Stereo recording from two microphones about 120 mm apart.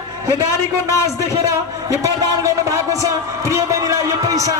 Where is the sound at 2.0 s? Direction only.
30° right (ahead or behind).